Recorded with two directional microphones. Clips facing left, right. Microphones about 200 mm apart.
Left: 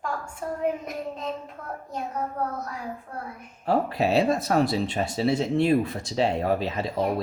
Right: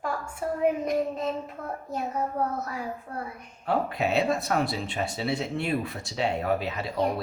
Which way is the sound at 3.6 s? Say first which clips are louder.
Left 3 dB; 30° left (ahead or behind).